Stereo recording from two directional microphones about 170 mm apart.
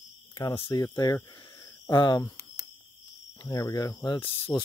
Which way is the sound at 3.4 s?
20° left (ahead or behind).